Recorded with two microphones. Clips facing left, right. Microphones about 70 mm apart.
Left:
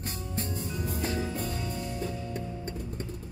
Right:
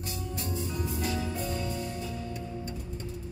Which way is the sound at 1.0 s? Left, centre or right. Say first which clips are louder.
Left 2 dB; left.